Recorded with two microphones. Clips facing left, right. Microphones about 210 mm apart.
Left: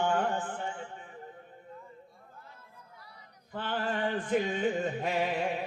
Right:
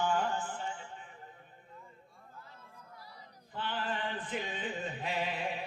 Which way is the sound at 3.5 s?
45° left (ahead or behind).